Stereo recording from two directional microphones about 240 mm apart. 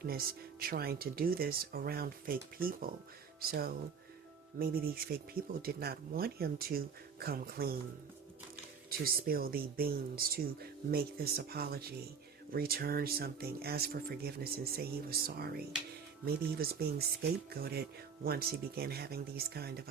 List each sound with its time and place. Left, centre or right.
0.6 s speech: right
4.5 s speech: right
8.9 s speech: right